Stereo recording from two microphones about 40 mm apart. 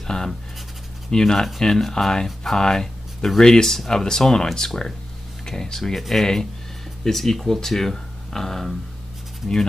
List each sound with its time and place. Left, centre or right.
0.0 s speech: centre